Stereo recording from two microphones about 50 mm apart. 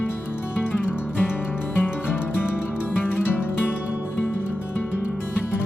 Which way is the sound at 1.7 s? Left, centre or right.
Left.